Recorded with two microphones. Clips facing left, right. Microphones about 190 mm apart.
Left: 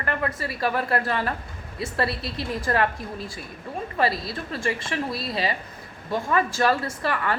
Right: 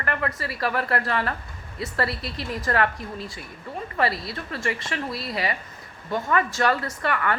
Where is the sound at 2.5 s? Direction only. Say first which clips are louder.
Even; 25° left (ahead or behind).